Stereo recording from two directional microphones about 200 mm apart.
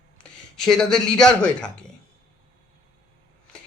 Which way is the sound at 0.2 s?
Centre (ahead or behind).